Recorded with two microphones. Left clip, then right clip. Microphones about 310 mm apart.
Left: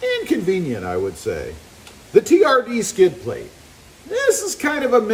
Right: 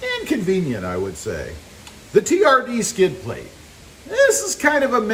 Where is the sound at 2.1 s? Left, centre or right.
Centre.